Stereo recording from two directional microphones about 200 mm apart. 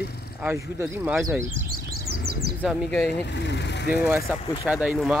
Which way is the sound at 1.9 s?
50° right (ahead or behind).